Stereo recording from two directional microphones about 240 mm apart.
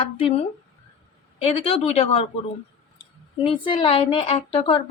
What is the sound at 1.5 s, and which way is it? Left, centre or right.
A woman's voice, left.